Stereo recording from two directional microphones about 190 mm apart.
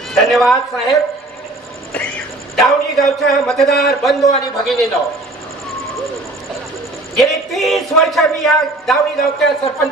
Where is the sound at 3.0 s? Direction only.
Centre (ahead or behind).